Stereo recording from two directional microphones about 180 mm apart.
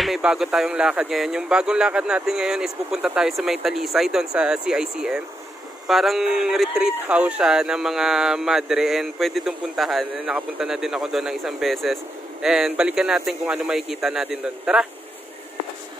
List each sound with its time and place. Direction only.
0.0 s speech: centre (ahead or behind)